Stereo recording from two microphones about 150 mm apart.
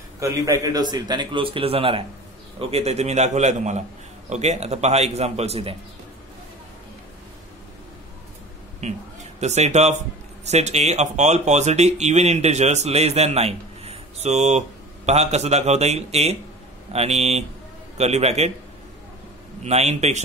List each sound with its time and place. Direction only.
0.2 s a man's voice: 20° right (ahead or behind); by 5.8 s 40° right (ahead or behind)
8.8 s speech: 50° right (ahead or behind)
19.6 s speech: 45° right (ahead or behind)